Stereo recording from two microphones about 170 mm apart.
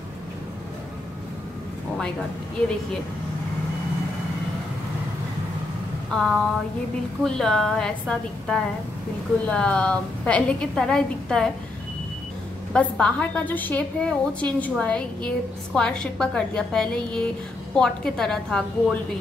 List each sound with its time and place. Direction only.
6.1 s a woman's voice: 5° left (ahead or behind)
12.7 s a woman's voice: 5° left (ahead or behind)